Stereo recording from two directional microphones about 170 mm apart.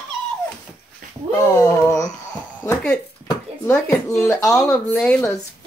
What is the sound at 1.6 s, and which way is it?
Speech, 15° left (ahead or behind).